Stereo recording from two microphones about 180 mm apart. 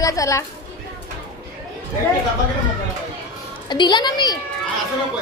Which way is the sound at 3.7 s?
25° left (ahead or behind).